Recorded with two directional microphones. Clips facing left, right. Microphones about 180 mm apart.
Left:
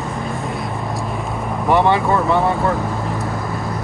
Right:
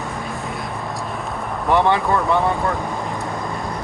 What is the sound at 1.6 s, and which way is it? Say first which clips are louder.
Speech: left 2 dB; 20° left (ahead or behind).